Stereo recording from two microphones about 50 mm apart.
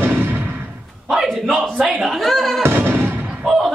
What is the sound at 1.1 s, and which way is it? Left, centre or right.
Speech, centre.